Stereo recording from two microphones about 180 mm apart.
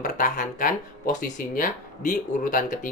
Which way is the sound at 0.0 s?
50° left (ahead or behind).